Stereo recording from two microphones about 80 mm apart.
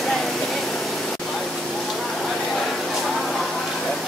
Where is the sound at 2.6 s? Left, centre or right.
Centre.